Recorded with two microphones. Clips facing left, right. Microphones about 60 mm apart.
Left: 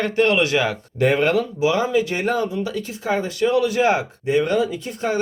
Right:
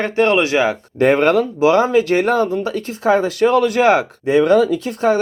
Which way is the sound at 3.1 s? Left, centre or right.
Right.